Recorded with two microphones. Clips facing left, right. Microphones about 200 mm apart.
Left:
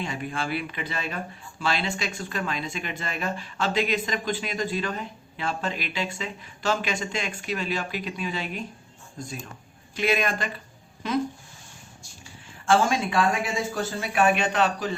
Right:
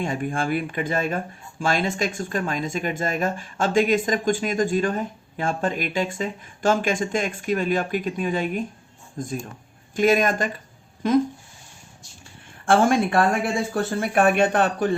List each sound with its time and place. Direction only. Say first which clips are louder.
0.0 s speech: right 5 dB; 50° right (ahead or behind)
12.6 s speech: right 4 dB; 55° right (ahead or behind)